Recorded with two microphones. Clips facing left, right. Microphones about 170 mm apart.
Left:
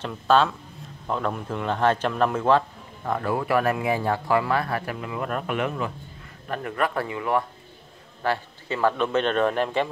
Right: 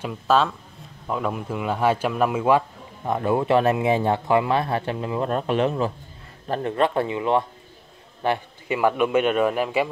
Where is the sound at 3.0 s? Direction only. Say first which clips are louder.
Right 4 dB; 20° right (ahead or behind).